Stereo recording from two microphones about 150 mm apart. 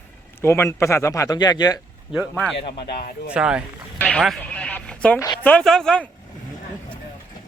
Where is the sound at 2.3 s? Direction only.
5° left (ahead or behind).